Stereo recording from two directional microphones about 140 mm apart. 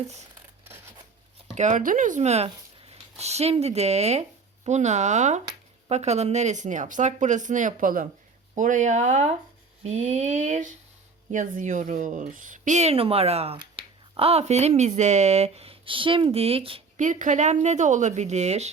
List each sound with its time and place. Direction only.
0.1 s scissors: 55° right (ahead or behind)
1.5 s speech: 60° right (ahead or behind); by 16.8 s 40° right (ahead or behind)
17.0 s speech: 65° right (ahead or behind)